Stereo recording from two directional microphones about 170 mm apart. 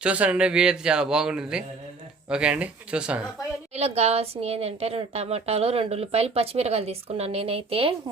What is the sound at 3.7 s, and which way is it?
A woman's voice, 40° right (ahead or behind).